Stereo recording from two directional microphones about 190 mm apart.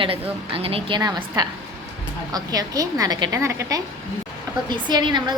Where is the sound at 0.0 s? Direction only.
30° right (ahead or behind).